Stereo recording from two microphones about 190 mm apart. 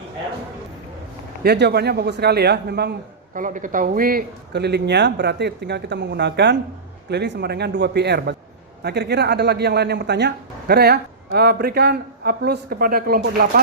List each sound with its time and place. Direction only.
1.5 s speech: 60° right (ahead or behind)
3.3 s speech: 45° right (ahead or behind)